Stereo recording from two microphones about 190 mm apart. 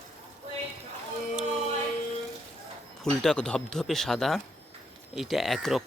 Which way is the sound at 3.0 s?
5° left (ahead or behind).